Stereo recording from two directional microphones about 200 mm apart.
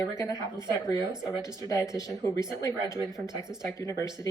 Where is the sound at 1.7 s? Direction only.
15° left (ahead or behind).